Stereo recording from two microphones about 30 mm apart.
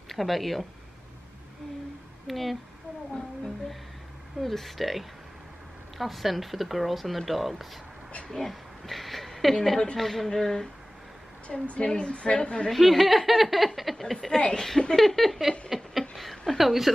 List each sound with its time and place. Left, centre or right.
0.1 s speech: centre
2.2 s speech: centre
4.4 s speech: centre
8.3 s a woman's voice: centre
11.4 s a woman's voice: left
12.7 s speech: centre
14.5 s speech: centre
15.7 s a sound: centre
16.5 s speech: centre